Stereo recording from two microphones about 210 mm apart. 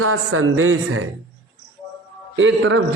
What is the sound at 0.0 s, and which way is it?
A man's voice, 85° right.